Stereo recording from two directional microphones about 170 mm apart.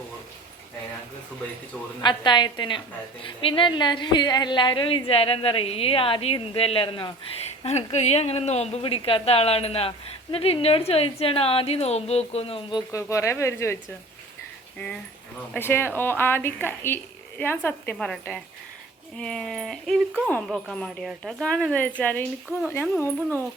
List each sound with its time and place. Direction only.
2.0 s a woman's voice: 25° left (ahead or behind)
12.9 s a woman's voice: 15° left (ahead or behind)
15.5 s a woman's voice: 10° left (ahead or behind)